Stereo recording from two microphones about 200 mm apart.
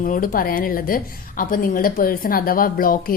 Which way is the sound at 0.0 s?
45° left (ahead or behind).